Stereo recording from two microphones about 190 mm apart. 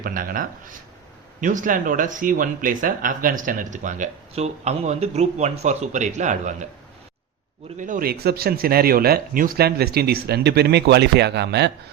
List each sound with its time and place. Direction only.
0.0 s speech: 50° right (ahead or behind)
7.8 s speech: 45° right (ahead or behind); by 11.7 s 60° right (ahead or behind)